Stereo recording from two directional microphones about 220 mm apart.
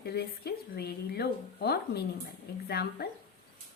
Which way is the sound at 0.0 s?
45° left (ahead or behind).